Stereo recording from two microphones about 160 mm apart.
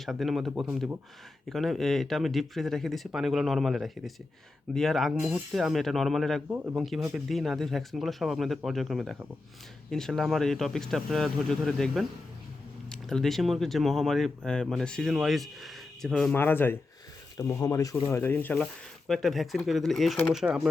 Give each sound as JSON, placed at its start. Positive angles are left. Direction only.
{"t": 0.0, "sound": "speech", "side_deg": 0}